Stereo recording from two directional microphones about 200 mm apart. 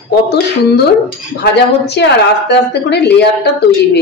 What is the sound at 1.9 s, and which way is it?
A woman's voice, 55° left (ahead or behind).